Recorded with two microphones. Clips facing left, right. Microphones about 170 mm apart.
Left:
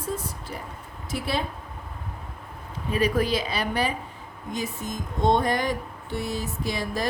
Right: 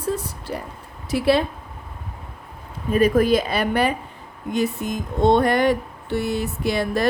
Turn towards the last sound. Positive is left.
turn(degrees=-65)  # may be behind; listen again after turning